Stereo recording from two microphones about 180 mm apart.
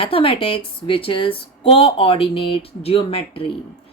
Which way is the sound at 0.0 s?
30° left (ahead or behind).